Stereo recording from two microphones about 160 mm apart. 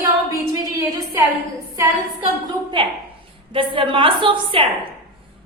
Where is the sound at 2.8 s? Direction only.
30° right (ahead or behind).